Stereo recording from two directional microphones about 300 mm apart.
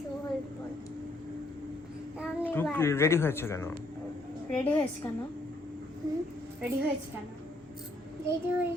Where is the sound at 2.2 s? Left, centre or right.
Centre.